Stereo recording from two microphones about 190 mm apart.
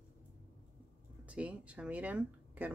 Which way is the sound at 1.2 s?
5° right (ahead or behind).